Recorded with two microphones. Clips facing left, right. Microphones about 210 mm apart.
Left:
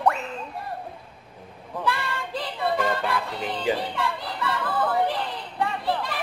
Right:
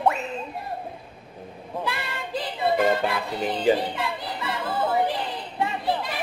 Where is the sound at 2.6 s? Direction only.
20° right (ahead or behind).